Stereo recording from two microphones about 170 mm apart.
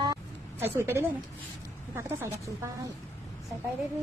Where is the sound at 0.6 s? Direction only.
15° right (ahead or behind).